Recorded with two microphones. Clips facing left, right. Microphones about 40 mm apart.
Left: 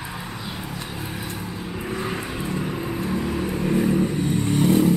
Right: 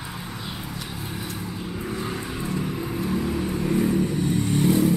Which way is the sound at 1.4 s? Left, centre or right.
Centre.